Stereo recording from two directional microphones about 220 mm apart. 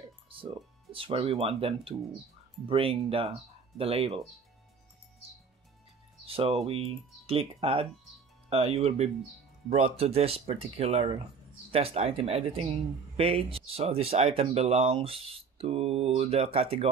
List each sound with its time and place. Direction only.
0.9 s speech: 25° right (ahead or behind)
6.2 s speech: 25° right (ahead or behind)